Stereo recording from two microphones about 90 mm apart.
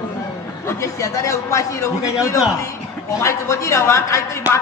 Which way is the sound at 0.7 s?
35° left (ahead or behind).